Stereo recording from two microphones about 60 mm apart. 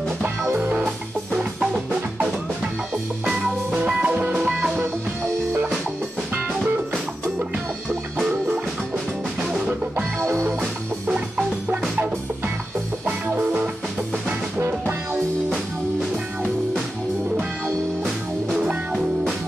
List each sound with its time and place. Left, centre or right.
0.6 s music: right
3.7 s music: right
4.4 s music: centre
6.6 s music: right
10.2 s music: right
11.1 s music: right
13.0 s music: right
18.6 s music: centre